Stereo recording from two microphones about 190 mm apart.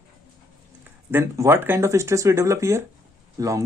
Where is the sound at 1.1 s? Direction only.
15° right (ahead or behind).